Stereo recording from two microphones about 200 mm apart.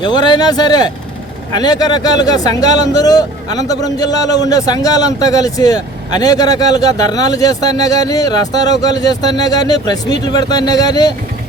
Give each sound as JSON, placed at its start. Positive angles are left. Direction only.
{"t": 0.0, "sound": "speech", "side_deg": 20}